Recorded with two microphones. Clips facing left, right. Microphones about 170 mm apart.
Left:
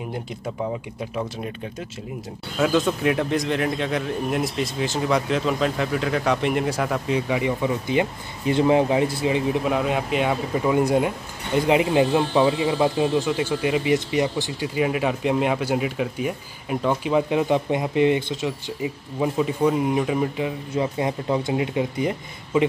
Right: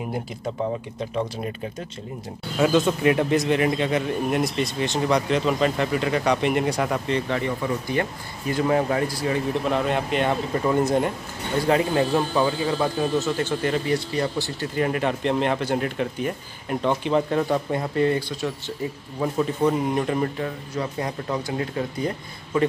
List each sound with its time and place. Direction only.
2.6 s speech: centre (ahead or behind); by 9.6 s 20° left (ahead or behind)
9.7 s speech: 5° left (ahead or behind)
14.8 s speech: 5° left (ahead or behind)